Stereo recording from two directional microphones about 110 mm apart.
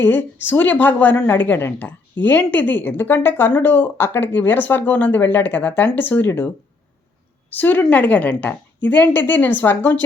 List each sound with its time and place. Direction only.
0.0 s a woman's voice: 20° left (ahead or behind)
7.5 s a woman's voice: 15° left (ahead or behind)